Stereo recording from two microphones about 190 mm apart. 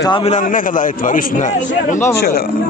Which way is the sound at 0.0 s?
25° left (ahead or behind).